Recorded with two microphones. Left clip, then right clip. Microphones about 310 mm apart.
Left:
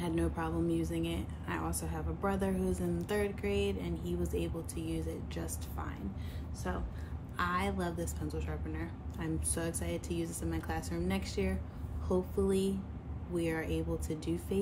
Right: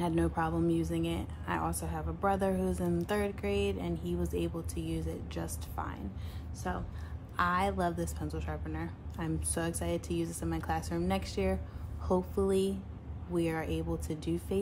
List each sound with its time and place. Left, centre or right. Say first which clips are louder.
0.0 s speech: right 4 dB; centre